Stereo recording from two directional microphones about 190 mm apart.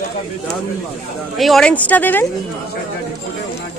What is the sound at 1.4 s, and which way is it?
Speech, centre (ahead or behind).